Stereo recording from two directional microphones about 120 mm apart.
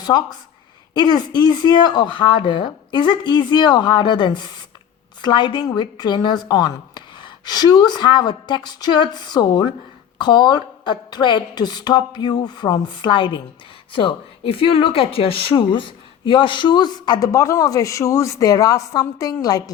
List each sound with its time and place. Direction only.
0.0 s speech: 35° left (ahead or behind)